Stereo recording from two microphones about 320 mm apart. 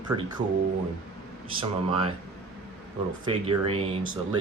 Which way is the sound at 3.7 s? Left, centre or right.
Centre.